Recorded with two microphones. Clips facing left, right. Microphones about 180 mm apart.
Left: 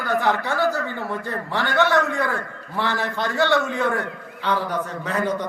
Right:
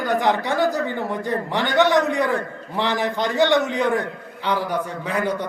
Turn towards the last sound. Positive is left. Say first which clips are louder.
# right 1 dB
turn(degrees=-10)  # may be behind; listen again after turning